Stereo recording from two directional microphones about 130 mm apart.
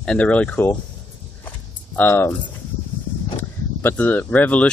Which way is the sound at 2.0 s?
15° left (ahead or behind).